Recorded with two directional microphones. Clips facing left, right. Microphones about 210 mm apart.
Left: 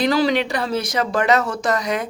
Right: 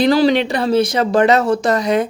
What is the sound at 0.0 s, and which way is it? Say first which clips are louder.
Speech: right 5 dB; 30° right (ahead or behind).